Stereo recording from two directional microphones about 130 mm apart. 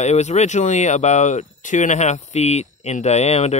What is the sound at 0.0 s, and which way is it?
Speech, 60° left (ahead or behind).